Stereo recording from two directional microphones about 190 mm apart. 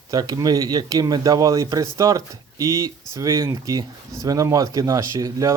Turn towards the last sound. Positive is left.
turn(degrees=-20)  # may be behind; listen again after turning